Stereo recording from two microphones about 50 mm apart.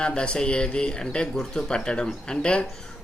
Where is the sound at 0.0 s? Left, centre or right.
Centre.